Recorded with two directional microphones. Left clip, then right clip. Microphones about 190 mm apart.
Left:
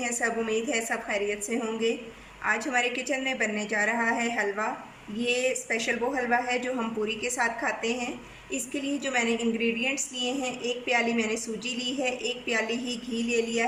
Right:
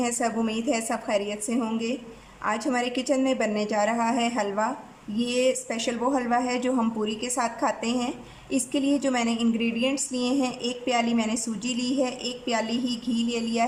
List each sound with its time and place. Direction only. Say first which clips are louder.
0.0 s a woman's voice: right 2 dB; 30° right (ahead or behind)